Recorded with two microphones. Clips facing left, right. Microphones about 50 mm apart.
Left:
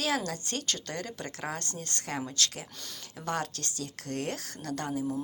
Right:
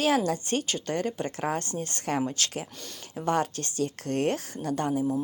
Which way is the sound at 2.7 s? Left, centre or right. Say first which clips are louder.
Right 2 dB; centre.